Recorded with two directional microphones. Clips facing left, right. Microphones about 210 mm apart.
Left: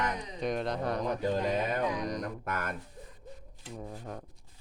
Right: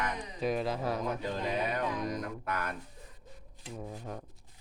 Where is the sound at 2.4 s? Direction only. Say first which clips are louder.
Right 1 dB; 50° left (ahead or behind).